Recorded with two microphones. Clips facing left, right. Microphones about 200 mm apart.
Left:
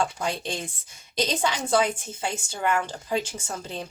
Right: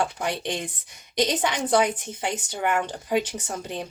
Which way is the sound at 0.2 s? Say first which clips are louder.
Right 1 dB; 20° right (ahead or behind).